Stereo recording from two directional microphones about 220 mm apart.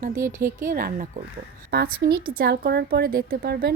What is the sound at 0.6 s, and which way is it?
A woman's voice, 40° right (ahead or behind).